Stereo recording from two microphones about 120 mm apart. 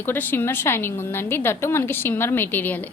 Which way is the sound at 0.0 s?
15° left (ahead or behind).